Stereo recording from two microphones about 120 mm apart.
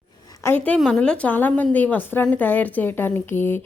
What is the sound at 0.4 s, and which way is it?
A woman's voice, 15° left (ahead or behind).